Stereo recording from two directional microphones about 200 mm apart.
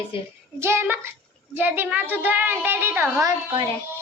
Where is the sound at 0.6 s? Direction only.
10° right (ahead or behind).